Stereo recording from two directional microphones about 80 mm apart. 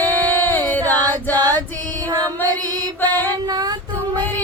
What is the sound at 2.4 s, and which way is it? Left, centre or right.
Music, left.